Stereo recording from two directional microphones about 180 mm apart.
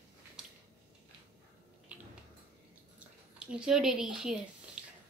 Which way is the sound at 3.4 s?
5° right (ahead or behind).